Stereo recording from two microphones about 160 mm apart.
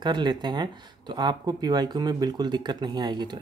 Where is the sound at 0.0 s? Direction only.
30° right (ahead or behind).